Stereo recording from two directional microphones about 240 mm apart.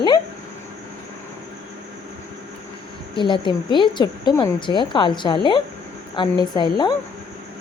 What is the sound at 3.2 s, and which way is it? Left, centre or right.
A woman's voice, centre.